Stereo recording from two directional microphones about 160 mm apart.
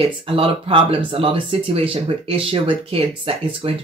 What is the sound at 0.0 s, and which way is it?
Speech, 35° right (ahead or behind).